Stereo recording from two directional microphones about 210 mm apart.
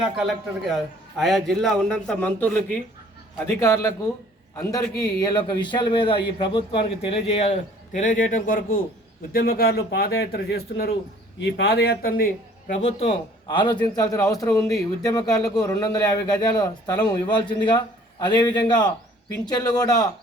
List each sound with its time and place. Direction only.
0.0 s a man's voice: centre (ahead or behind); by 20.1 s 20° left (ahead or behind)